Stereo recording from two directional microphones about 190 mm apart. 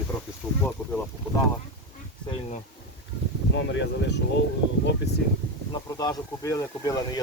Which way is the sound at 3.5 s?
70° left (ahead or behind).